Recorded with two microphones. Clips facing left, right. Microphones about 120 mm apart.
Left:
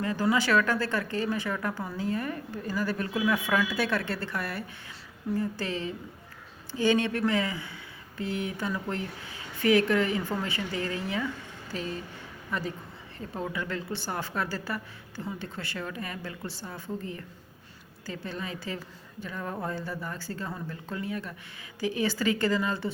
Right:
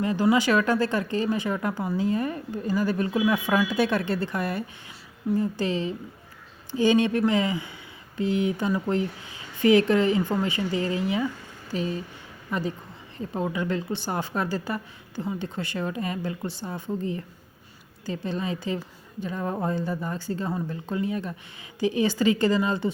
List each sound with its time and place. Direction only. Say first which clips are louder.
0.0 s a man's voice: right 5 dB; 20° right (ahead or behind)